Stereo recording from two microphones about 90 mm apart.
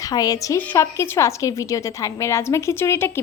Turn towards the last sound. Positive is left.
turn(degrees=25)  # may be behind; listen again after turning